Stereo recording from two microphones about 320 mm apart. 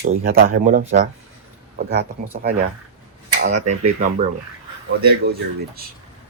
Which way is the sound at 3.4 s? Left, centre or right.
Right.